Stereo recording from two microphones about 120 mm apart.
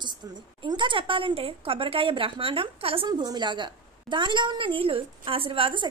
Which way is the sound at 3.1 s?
35° right (ahead or behind).